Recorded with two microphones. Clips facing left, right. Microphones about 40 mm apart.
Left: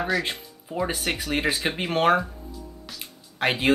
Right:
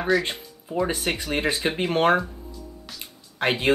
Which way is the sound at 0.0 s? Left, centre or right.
Centre.